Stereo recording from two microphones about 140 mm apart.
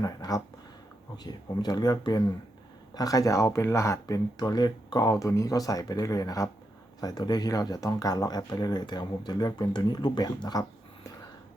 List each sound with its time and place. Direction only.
0.0 s speech: 25° left (ahead or behind)